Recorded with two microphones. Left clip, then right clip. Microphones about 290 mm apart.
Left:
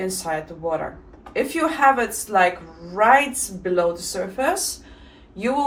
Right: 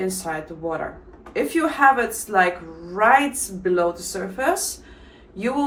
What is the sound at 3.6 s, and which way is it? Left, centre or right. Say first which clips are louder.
Speech: even; centre.